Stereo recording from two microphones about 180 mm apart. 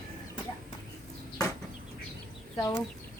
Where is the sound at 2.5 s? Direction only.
20° left (ahead or behind).